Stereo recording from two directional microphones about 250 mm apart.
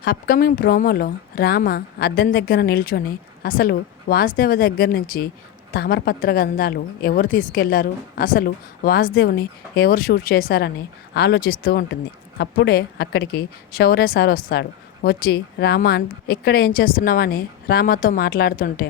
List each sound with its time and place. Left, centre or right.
0.0 s a woman's voice: left